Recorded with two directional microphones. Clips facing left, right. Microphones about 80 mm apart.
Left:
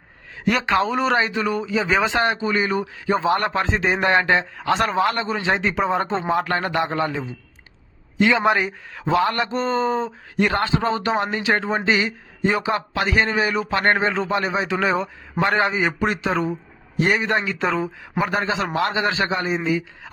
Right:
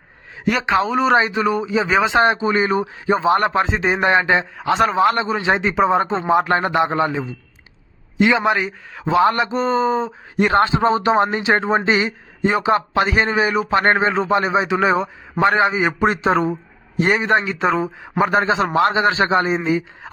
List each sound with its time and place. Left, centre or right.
0.6 s a man's voice: centre
1.1 s a man's voice: centre
1.9 s speech: centre
2.1 s a man's voice: right; by 4.9 s centre
4.9 s a man's voice: right
8.4 s speech: centre
9.1 s a man's voice: centre
10.3 s speech: right
16.0 s speech: right
18.2 s a man's voice: right
19.3 s a man's voice: right